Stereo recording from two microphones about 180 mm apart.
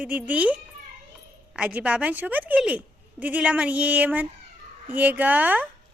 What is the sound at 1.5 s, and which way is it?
A woman's voice, 5° right (ahead or behind).